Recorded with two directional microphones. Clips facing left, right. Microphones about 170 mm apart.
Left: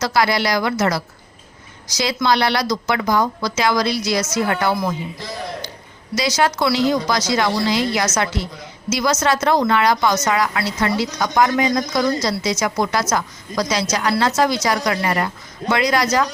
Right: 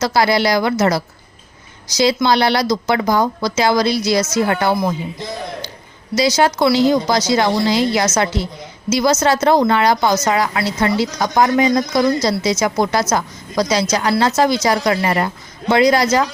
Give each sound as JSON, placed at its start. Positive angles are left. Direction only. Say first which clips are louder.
{"t": 0.0, "sound": "speech", "louder": "right 3 dB", "side_deg": -30}